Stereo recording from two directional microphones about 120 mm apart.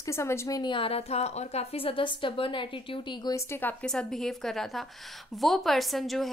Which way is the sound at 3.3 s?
20° left (ahead or behind).